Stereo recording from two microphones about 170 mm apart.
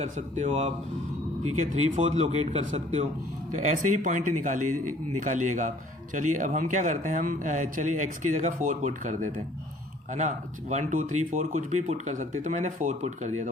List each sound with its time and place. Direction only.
0.0 s speech: 40° right (ahead or behind)